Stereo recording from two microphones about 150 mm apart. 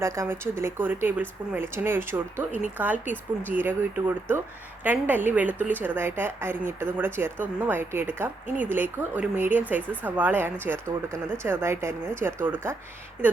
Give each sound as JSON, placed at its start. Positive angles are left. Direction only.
{"t": 0.0, "sound": "speech", "side_deg": -20}